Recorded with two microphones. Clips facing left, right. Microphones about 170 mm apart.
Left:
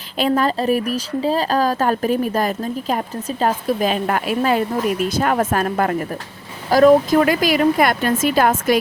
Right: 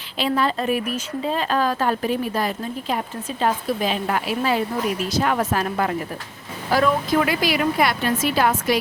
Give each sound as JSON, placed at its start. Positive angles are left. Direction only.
{"t": 0.2, "sound": "speech", "side_deg": 45}